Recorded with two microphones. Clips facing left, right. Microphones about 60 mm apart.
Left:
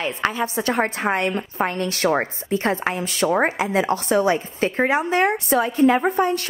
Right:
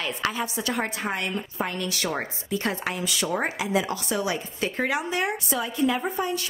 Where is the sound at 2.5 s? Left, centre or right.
Left.